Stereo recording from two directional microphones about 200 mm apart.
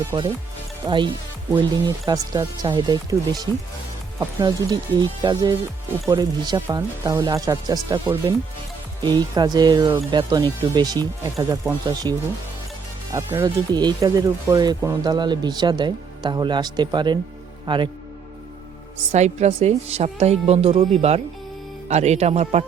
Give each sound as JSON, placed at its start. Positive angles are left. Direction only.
{"t": 0.9, "sound": "speech", "side_deg": -25}
{"t": 13.1, "sound": "speech", "side_deg": -15}
{"t": 19.1, "sound": "a woman's voice", "side_deg": -35}